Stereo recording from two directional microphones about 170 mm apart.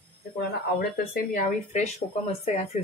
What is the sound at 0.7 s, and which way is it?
Speech, 65° left (ahead or behind).